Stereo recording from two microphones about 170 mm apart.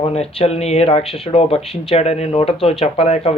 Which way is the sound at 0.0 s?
35° left (ahead or behind).